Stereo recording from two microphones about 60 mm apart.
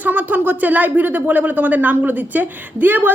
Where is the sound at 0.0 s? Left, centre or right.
Right.